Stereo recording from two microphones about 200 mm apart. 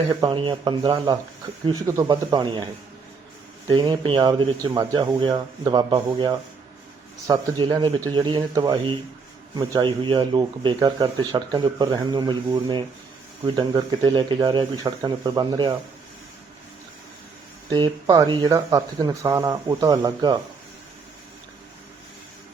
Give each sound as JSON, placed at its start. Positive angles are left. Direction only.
{"t": 0.1, "sound": "speech", "side_deg": -25}
{"t": 3.7, "sound": "speech", "side_deg": -20}
{"t": 17.7, "sound": "speech", "side_deg": -20}